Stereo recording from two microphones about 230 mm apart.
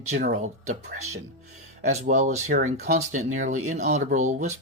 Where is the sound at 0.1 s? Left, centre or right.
Right.